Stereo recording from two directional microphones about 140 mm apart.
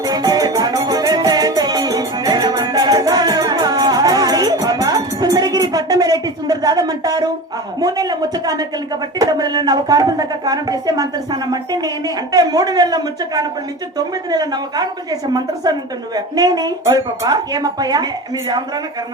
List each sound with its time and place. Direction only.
0.0 s music: 25° right (ahead or behind)
7.8 s a woman's voice: 30° right (ahead or behind)